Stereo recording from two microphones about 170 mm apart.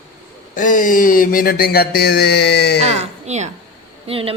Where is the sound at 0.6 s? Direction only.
50° left (ahead or behind); by 2.8 s 80° left.